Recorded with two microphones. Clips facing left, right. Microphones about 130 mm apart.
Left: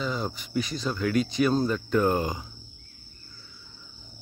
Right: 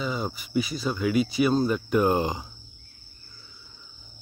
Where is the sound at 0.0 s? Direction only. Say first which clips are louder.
Right 1 dB; 5° right (ahead or behind).